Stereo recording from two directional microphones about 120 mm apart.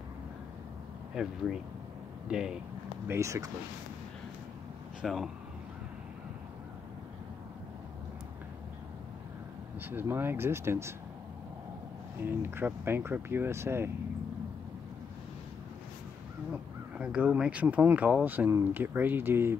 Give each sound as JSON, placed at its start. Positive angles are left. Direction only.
{"t": 1.1, "sound": "speech", "side_deg": -5}
{"t": 3.1, "sound": "speech", "side_deg": -25}
{"t": 5.0, "sound": "speech", "side_deg": 0}
{"t": 9.8, "sound": "speech", "side_deg": -15}
{"t": 12.2, "sound": "speech", "side_deg": -20}
{"t": 17.0, "sound": "speech", "side_deg": -10}